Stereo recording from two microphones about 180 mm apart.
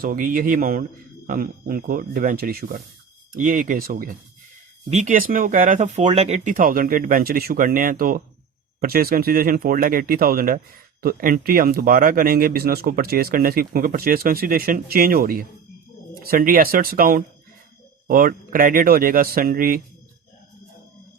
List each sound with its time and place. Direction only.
0.0 s speech: 55° right (ahead or behind)